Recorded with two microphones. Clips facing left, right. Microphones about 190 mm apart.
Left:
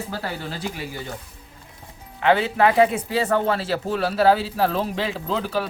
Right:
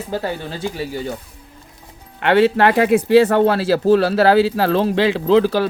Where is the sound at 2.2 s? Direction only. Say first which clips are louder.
Right 5 dB; 70° right (ahead or behind).